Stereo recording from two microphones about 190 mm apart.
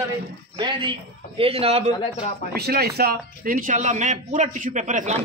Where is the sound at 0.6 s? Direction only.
25° right (ahead or behind).